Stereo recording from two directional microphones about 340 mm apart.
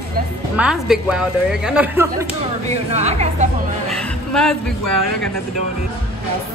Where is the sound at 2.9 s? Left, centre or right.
Centre.